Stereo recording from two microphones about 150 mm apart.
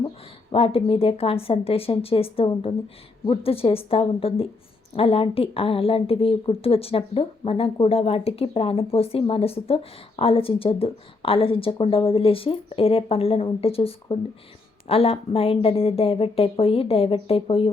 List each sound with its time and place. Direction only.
0.5 s a woman's voice: 40° left (ahead or behind)